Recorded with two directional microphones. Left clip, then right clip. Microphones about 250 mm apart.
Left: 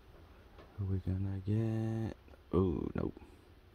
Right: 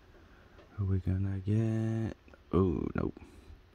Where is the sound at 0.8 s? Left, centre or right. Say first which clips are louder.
Right 4 dB; right.